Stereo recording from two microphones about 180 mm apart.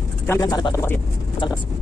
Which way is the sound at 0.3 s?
20° left (ahead or behind).